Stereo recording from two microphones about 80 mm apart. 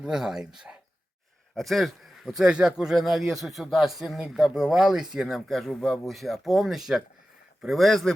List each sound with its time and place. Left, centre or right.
0.0 s speech: centre